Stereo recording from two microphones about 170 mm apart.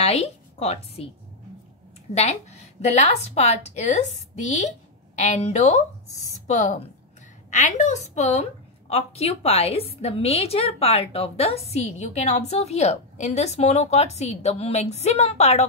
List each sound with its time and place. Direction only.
0.0 s speech: 35° left (ahead or behind)
2.1 s a woman's voice: 40° left (ahead or behind)